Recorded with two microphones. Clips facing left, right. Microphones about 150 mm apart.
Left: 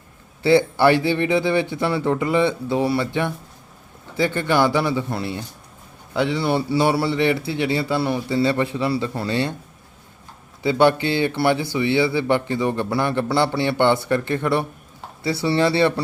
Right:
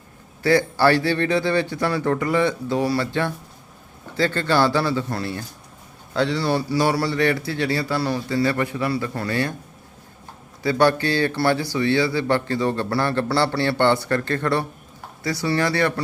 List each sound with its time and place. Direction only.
0.4 s a man's voice: 20° left (ahead or behind)
10.6 s speech: 20° left (ahead or behind)